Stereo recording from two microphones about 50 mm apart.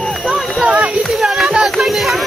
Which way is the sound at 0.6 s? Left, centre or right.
Right.